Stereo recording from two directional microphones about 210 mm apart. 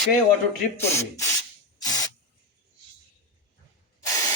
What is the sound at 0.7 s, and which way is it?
Speech, 10° left (ahead or behind).